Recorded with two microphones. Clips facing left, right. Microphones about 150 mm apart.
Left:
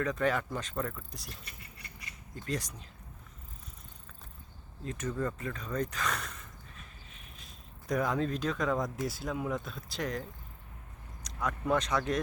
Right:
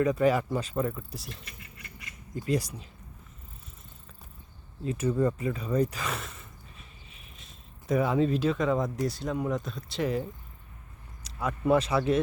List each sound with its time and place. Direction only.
0.0 s speech: 10° right (ahead or behind)
1.5 s dog: 35° left (ahead or behind)
2.3 s speech: 10° right (ahead or behind)
4.9 s speech: 10° right (ahead or behind)